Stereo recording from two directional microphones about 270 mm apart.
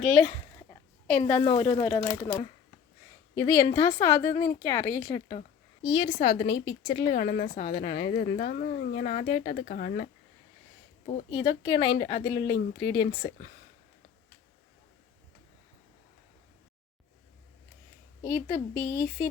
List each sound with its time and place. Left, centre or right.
0.0 s a woman's voice: centre; by 10.1 s left
11.3 s speech: centre
18.2 s speech: centre